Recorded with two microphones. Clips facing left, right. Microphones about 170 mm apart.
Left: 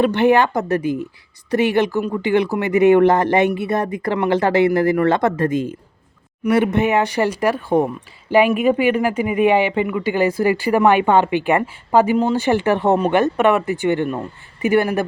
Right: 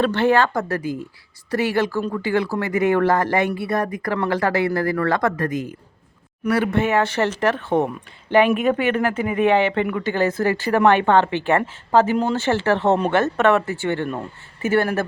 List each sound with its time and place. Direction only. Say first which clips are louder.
0.0 s speech: left 3 dB; 15° left (ahead or behind)